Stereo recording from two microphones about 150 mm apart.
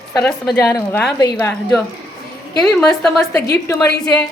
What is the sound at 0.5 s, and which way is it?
A woman's voice, 20° left (ahead or behind).